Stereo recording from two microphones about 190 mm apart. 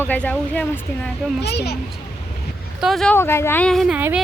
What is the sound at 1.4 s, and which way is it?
Speech, 60° left (ahead or behind).